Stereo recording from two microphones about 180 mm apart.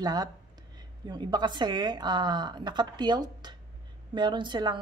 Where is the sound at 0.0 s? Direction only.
20° right (ahead or behind).